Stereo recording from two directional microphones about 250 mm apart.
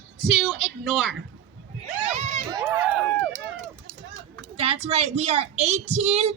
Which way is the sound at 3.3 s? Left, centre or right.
Right.